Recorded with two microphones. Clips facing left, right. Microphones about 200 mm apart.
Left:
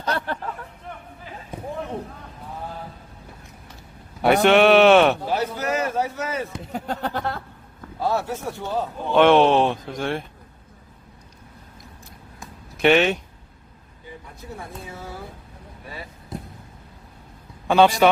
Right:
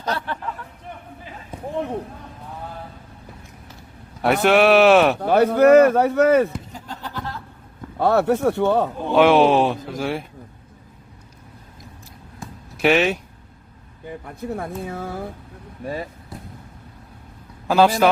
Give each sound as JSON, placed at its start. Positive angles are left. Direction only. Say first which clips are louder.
{"t": 4.2, "sound": "speech", "louder": "left 1 dB", "side_deg": 0}
{"t": 5.2, "sound": "speech", "louder": "right 11 dB", "side_deg": -60}
{"t": 6.7, "sound": "speech", "louder": "left 6 dB", "side_deg": 65}
{"t": 7.9, "sound": "speech", "louder": "right 7 dB", "side_deg": -60}
{"t": 9.1, "sound": "speech", "louder": "right 1 dB", "side_deg": -5}
{"t": 12.8, "sound": "speech", "louder": "even", "side_deg": 0}
{"t": 14.3, "sound": "speech", "louder": "right 10 dB", "side_deg": -55}
{"t": 17.7, "sound": "speech", "louder": "even", "side_deg": 0}